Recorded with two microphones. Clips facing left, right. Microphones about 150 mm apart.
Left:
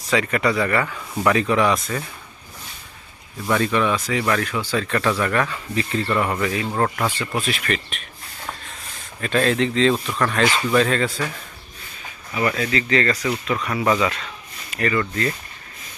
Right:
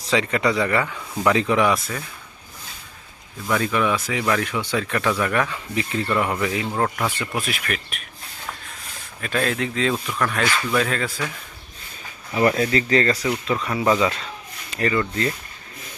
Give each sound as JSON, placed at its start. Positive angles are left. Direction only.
{"t": 0.0, "sound": "speech", "side_deg": -25}
{"t": 0.9, "sound": "speech", "side_deg": 0}
{"t": 1.2, "sound": "speech", "side_deg": -15}
{"t": 3.5, "sound": "speech", "side_deg": -5}
{"t": 6.4, "sound": "speech", "side_deg": -15}
{"t": 6.7, "sound": "speech", "side_deg": 0}
{"t": 9.2, "sound": "speech", "side_deg": -5}
{"t": 10.4, "sound": "speech", "side_deg": 15}
{"t": 10.8, "sound": "speech", "side_deg": -5}
{"t": 12.3, "sound": "speech", "side_deg": -35}
{"t": 13.7, "sound": "speech", "side_deg": -25}